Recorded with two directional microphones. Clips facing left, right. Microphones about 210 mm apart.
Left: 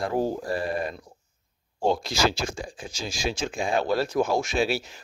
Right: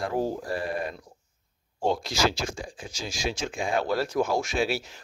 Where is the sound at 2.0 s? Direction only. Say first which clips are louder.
Left 1 dB; 30° left (ahead or behind).